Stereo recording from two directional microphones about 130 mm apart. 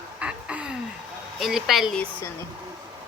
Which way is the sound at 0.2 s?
10° right (ahead or behind).